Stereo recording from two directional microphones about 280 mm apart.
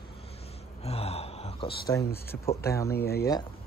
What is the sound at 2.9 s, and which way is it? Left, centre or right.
Speech, left.